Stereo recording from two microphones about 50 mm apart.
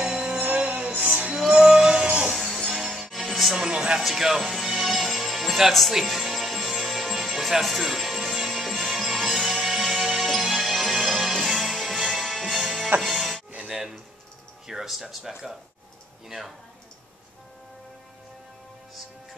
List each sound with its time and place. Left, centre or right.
0.0 s music: centre
1.3 s music: centre
2.5 s music: centre
3.6 s music: centre
4.0 s music: centre
14.7 s speech: centre